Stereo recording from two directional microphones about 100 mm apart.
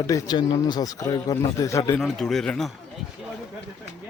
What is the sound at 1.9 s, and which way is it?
Speech, 5° left (ahead or behind).